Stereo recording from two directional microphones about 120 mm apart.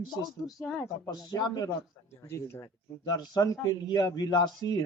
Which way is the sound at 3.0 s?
35° left (ahead or behind).